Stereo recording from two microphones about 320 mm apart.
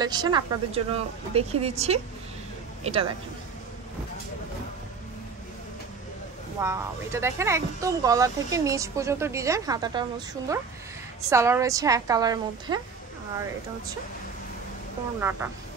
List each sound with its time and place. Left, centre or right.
0.0 s speech: centre
6.6 s speech: centre
15.1 s speech: centre